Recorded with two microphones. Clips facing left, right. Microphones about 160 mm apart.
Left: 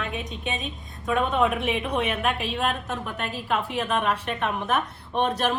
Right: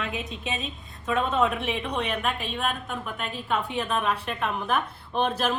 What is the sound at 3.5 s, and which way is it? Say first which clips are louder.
Speech: left 1 dB; 20° left (ahead or behind).